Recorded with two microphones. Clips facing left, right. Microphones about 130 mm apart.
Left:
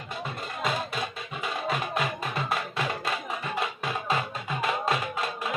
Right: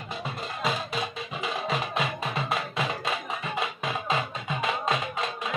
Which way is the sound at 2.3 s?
Centre (ahead or behind).